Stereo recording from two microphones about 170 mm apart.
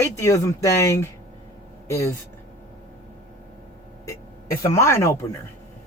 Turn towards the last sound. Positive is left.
turn(degrees=15)  # may be behind; listen again after turning